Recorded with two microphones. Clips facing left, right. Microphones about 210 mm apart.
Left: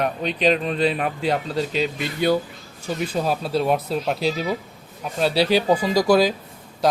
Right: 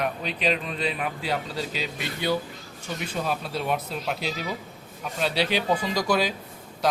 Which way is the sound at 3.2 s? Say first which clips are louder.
Left 6 dB; 35° left (ahead or behind).